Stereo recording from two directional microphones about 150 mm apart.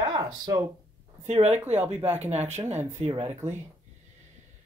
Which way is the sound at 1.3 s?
45° right (ahead or behind).